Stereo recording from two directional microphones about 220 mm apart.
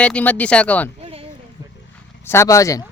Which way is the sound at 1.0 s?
25° right (ahead or behind).